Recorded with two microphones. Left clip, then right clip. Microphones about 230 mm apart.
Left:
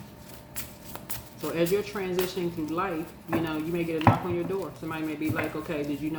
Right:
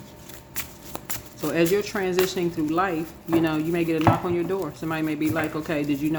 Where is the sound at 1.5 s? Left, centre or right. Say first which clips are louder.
Right 5 dB; right.